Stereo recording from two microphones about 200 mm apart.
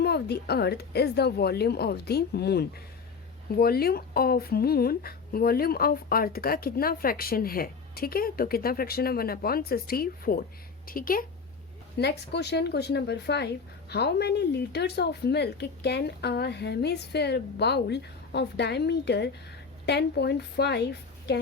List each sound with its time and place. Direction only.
0.0 s speech: 55° left (ahead or behind)
11.9 s speech: 55° left (ahead or behind)